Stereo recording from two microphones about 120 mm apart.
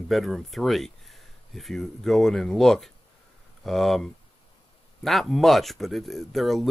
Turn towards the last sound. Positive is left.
turn(degrees=0)  # may be behind; listen again after turning